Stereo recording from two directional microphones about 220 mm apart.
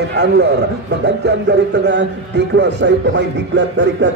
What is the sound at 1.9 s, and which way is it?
Speech, 55° right (ahead or behind).